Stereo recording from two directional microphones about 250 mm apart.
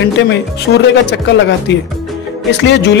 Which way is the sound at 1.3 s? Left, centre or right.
Left.